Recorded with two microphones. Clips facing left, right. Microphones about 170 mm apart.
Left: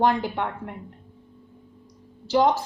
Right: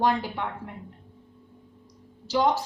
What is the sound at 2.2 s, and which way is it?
Speech, 55° left (ahead or behind).